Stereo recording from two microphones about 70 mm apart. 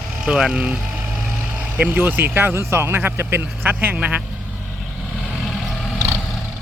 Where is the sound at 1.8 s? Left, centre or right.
Right.